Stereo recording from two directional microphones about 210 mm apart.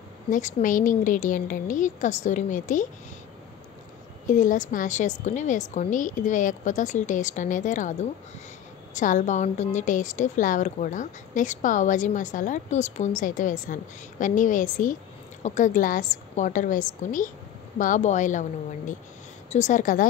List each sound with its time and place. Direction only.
0.3 s a woman's voice: 35° left (ahead or behind)
4.3 s a woman's voice: 40° left (ahead or behind)